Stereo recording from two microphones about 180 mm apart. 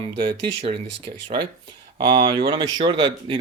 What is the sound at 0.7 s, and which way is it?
Speech, 70° right (ahead or behind).